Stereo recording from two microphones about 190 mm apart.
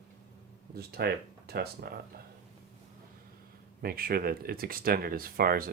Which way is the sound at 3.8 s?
50° right (ahead or behind).